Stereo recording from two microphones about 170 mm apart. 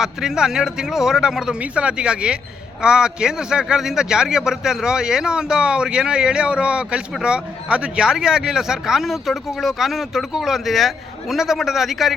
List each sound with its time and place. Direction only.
0.0 s a man's voice: 5° right (ahead or behind)